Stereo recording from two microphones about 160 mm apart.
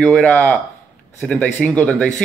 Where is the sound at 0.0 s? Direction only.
10° left (ahead or behind).